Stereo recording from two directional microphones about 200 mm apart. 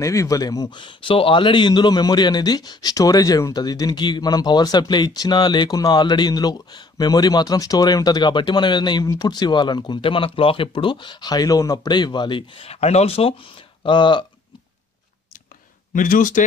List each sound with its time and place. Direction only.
0.0 s speech: 15° left (ahead or behind)
15.9 s speech: 40° left (ahead or behind)